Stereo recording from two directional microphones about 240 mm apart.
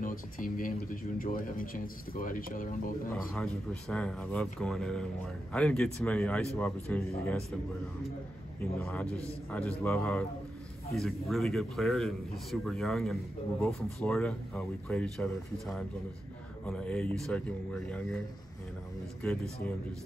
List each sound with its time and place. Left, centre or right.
0.0 s speech: left
3.9 s a man's voice: centre
8.7 s a man's voice: centre
19.2 s a man's voice: centre